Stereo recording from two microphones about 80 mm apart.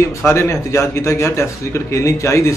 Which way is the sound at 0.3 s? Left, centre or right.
Left.